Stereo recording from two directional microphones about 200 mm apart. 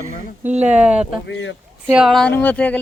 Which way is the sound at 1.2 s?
70° left (ahead or behind).